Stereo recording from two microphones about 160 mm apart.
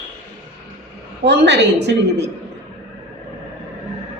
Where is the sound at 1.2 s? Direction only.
90° right.